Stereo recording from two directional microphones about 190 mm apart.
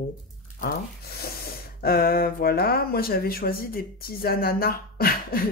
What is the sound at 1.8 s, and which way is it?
Speech, 50° left (ahead or behind).